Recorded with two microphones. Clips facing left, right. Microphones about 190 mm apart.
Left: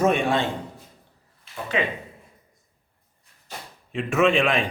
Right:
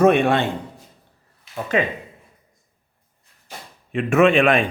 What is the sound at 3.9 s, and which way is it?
Speech, 60° right (ahead or behind).